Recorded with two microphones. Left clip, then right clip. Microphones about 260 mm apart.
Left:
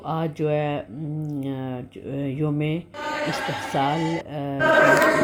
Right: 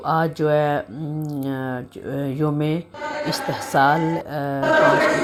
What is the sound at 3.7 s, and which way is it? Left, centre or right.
Speech, right.